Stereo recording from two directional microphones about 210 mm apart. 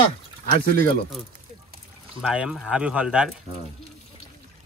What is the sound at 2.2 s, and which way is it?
Speech, 5° right (ahead or behind).